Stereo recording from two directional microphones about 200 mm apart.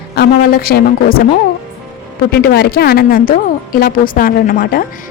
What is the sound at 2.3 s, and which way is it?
A woman's voice, 50° left (ahead or behind).